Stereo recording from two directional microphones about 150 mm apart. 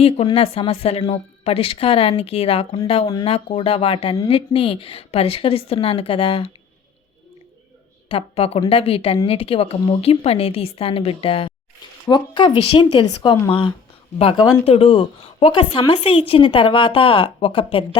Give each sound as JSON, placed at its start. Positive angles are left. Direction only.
{"t": 0.3, "sound": "a woman's voice", "side_deg": 40}
{"t": 8.1, "sound": "a woman's voice", "side_deg": 40}